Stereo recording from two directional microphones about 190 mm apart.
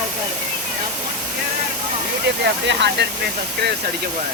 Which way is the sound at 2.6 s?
65° right (ahead or behind).